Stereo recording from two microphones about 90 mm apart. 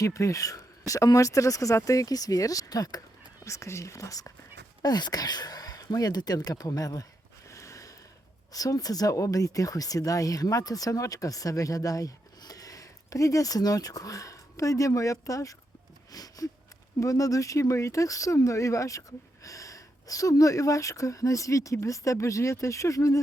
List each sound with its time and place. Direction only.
0.0 s speech: 35° left (ahead or behind)
4.8 s speech: 50° left (ahead or behind)
7.5 s a sound: 35° left (ahead or behind)
8.5 s speech: 40° left (ahead or behind)